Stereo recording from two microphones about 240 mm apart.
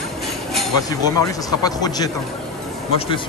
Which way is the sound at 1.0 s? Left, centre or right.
Centre.